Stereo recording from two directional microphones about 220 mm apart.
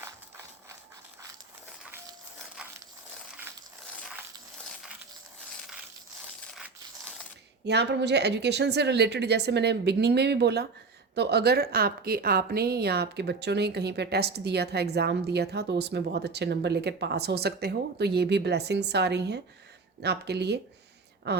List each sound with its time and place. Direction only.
6.5 s crushing: centre (ahead or behind)
7.6 s a woman's voice: 50° right (ahead or behind)